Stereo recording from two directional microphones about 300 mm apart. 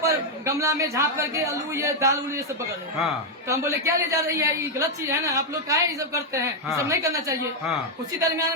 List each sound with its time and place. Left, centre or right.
0.1 s a woman's voice: centre
3.5 s a woman's voice: centre